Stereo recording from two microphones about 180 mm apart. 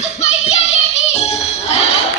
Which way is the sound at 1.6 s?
35° left (ahead or behind).